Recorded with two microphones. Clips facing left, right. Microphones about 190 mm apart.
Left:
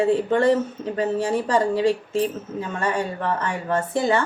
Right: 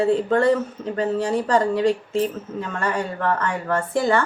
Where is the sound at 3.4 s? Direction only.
20° left (ahead or behind).